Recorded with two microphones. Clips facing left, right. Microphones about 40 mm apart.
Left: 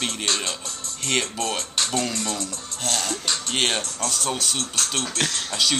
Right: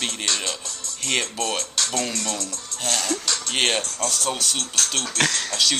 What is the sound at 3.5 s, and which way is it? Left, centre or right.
Speech, centre.